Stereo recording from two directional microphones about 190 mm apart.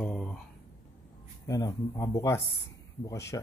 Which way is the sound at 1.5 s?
20° left (ahead or behind).